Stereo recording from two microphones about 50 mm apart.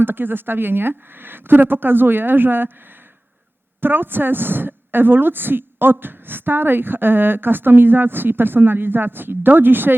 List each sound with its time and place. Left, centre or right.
0.0 s a woman's voice: right